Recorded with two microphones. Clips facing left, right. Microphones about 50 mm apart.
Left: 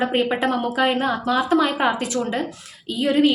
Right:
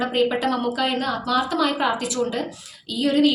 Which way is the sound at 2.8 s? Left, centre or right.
Left.